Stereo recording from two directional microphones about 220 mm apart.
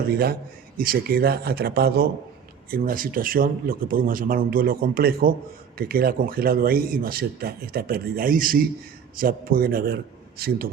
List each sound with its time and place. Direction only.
0.1 s speech: 45° right (ahead or behind)